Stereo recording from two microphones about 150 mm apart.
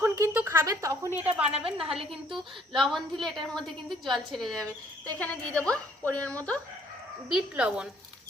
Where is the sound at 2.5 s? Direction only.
Centre (ahead or behind).